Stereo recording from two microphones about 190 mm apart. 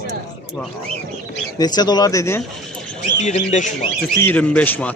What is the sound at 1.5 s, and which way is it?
Speech, 20° left (ahead or behind).